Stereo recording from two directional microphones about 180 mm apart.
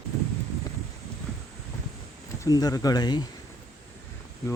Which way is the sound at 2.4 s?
20° left (ahead or behind).